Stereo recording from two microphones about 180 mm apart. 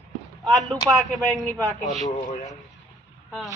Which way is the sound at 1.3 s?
20° right (ahead or behind).